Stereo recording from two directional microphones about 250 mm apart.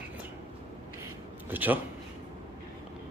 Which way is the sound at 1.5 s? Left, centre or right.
Centre.